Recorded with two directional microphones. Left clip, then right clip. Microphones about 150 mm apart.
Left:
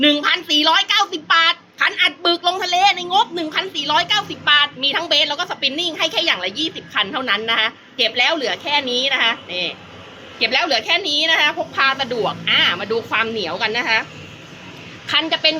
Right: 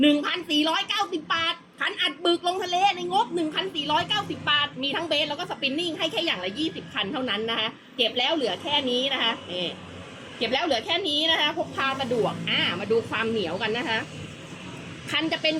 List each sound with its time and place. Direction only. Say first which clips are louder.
0.0 s a sound: left 7 dB; 15° right (ahead or behind)
3.1 s a woman's voice: left 7 dB; 15° right (ahead or behind)
15.0 s a woman's voice: left 8 dB; 15° right (ahead or behind)